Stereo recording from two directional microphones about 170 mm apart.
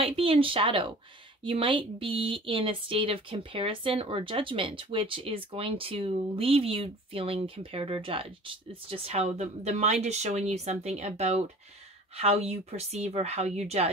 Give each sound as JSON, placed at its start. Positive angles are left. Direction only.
{"t": 0.0, "sound": "speech", "side_deg": -35}